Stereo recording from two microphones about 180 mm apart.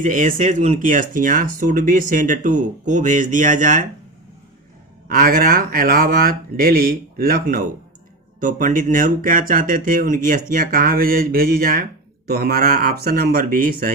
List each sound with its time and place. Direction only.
0.0 s speech: 45° right (ahead or behind)
5.0 s speech: 55° right (ahead or behind)